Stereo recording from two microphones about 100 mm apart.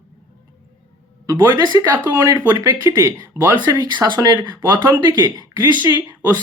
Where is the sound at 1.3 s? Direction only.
45° right (ahead or behind).